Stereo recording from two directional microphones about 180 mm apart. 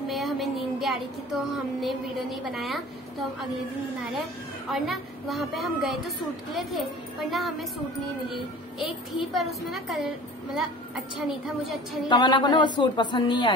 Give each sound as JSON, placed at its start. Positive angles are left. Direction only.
{"t": 0.1, "sound": "speech", "side_deg": 0}
{"t": 4.6, "sound": "a woman's voice", "side_deg": 0}
{"t": 8.7, "sound": "a woman's voice", "side_deg": 0}
{"t": 12.1, "sound": "speech", "side_deg": 25}